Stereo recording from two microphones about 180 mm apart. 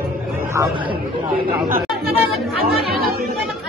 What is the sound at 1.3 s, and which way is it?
Speech, 55° right (ahead or behind).